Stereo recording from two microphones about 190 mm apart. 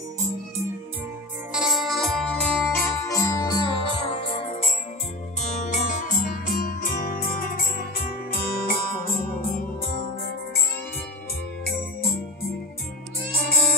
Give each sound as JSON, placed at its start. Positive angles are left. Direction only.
{"t": 1.5, "sound": "organ", "side_deg": 0}
{"t": 5.6, "sound": "music", "side_deg": 40}